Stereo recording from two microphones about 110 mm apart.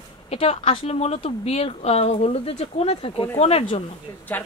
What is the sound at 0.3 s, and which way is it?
Speech, 65° left (ahead or behind).